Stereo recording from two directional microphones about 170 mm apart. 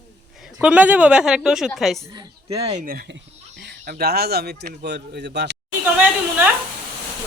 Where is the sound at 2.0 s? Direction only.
25° right (ahead or behind).